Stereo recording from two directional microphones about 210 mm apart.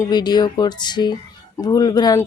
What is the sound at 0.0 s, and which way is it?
Speech, 20° left (ahead or behind).